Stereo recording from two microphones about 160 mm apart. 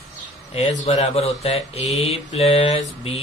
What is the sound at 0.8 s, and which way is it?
Mantra, 40° left (ahead or behind).